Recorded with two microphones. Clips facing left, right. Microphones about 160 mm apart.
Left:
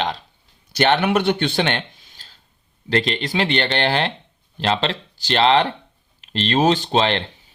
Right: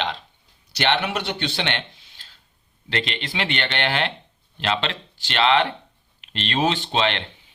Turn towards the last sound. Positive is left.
turn(degrees=40)  # may be behind; listen again after turning